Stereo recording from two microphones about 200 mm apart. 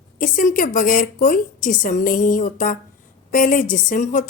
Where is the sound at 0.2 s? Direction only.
40° left (ahead or behind).